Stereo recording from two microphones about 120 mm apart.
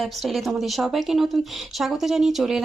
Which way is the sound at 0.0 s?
Centre (ahead or behind).